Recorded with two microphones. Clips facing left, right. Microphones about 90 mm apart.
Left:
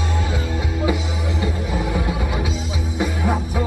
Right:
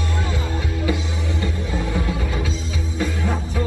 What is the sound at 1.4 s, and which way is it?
Music, 15° left (ahead or behind).